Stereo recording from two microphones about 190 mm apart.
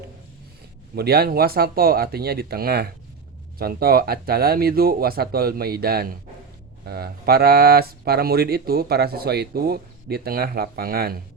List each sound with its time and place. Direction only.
0.9 s speech: 55° right (ahead or behind)